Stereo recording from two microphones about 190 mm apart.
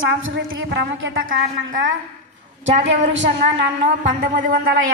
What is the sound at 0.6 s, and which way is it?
A woman's voice, 65° right (ahead or behind).